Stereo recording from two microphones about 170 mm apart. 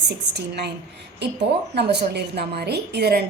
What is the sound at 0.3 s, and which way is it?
Speech, 75° right (ahead or behind).